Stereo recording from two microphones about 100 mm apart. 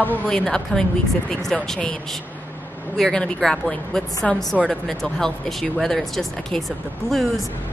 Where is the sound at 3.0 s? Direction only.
10° left (ahead or behind).